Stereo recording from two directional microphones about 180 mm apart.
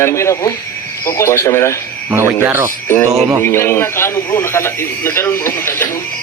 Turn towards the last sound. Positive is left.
turn(degrees=15)  # may be behind; listen again after turning